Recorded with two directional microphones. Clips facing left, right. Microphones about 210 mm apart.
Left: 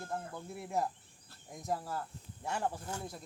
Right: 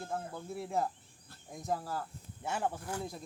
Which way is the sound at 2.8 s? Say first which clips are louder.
Right 3 dB; 25° left (ahead or behind).